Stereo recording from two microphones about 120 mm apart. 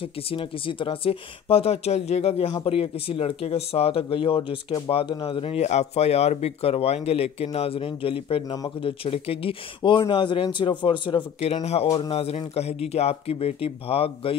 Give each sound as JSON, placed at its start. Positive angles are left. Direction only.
{"t": 0.0, "sound": "speech", "side_deg": 50}
{"t": 11.4, "sound": "speech", "side_deg": 60}